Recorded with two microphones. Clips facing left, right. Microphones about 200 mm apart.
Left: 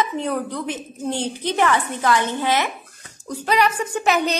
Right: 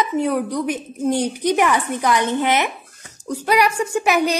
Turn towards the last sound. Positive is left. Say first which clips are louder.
# right 2 dB
turn(degrees=-10)  # may be behind; listen again after turning